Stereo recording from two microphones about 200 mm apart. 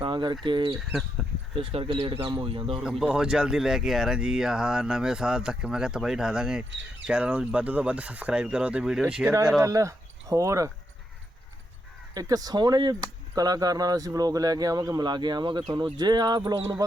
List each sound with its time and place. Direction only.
0.0 s bird: 25° right (ahead or behind)
0.4 s speech: 25° right (ahead or behind)
0.8 s speech: centre (ahead or behind)
1.5 s speech: 25° right (ahead or behind)
3.0 s speech: 5° right (ahead or behind)
9.6 s speech: 15° right (ahead or behind)
12.1 s speech: 20° right (ahead or behind)